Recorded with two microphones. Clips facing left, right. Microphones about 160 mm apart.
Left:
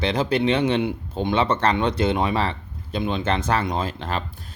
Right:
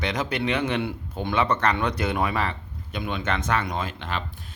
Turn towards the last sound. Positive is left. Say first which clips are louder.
# left 4 dB
turn(degrees=40)  # may be behind; listen again after turning